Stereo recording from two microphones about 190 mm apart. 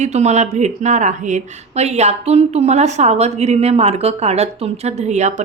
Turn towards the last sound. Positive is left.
turn(degrees=-35)  # may be behind; listen again after turning